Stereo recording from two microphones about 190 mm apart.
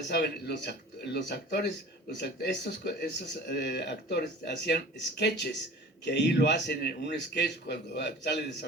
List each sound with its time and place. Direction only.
0.1 s speech: 60° left (ahead or behind)